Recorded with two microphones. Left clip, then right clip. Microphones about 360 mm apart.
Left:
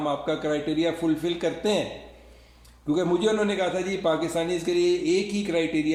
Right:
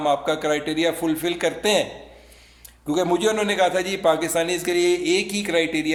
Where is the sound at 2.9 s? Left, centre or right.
Right.